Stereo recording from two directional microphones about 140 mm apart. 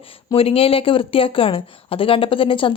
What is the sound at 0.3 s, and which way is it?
Speech, 45° left (ahead or behind).